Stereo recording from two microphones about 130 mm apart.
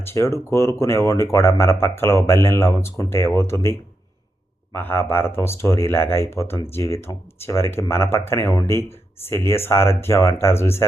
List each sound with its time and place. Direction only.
0.1 s speech: 20° left (ahead or behind)